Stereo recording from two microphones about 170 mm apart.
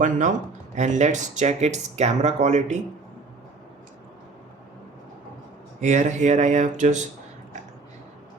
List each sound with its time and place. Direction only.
0.0 s speech: 45° right (ahead or behind)
5.8 s speech: 45° right (ahead or behind)